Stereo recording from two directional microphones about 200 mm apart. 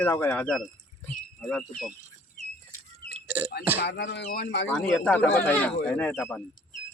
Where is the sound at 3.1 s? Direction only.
10° right (ahead or behind).